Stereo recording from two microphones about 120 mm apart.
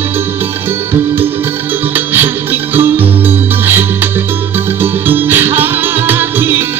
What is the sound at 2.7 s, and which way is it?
Music, 15° right (ahead or behind).